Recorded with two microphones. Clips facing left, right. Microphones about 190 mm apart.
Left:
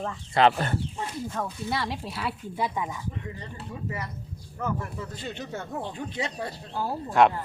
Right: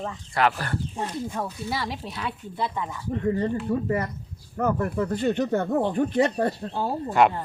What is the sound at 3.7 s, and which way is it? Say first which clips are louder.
Speech: right 10 dB; 50° right (ahead or behind).